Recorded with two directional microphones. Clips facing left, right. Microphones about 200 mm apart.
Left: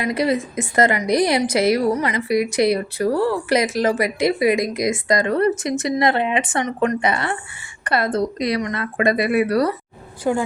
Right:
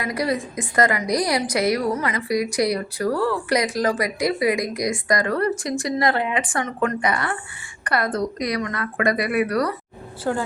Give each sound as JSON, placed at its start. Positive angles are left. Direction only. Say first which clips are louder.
{"t": 0.0, "sound": "a woman's voice", "louder": "left 4 dB", "side_deg": 25}
{"t": 10.3, "sound": "a woman's voice", "louder": "left 4 dB", "side_deg": 15}